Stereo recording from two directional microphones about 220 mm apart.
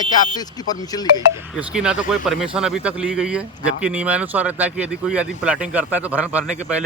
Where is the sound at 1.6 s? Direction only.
5° right (ahead or behind).